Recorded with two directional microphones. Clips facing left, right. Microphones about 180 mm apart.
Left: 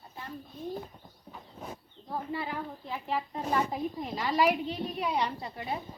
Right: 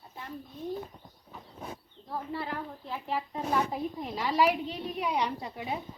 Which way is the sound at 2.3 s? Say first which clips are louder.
Even; 5° left (ahead or behind).